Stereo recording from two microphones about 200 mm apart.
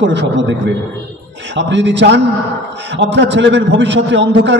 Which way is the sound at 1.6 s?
65° right (ahead or behind).